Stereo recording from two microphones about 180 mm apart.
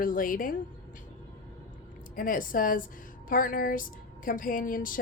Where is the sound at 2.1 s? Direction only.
50° left (ahead or behind).